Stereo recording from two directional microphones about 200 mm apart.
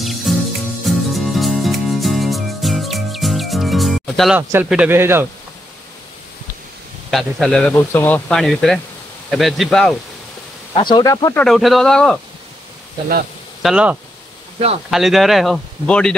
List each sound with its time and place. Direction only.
0.0 s music: centre (ahead or behind)
4.4 s speech: 10° right (ahead or behind)
7.1 s a man's voice: centre (ahead or behind)
10.7 s speech: 25° left (ahead or behind)
11.4 s a man's voice: centre (ahead or behind)
13.6 s a man's voice: 5° right (ahead or behind)